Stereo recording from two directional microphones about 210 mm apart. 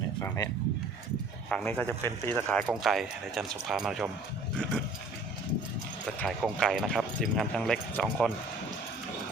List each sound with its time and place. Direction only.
0.2 s a sound: 15° left (ahead or behind)
1.5 s speech: 5° left (ahead or behind)
6.1 s speech: centre (ahead or behind)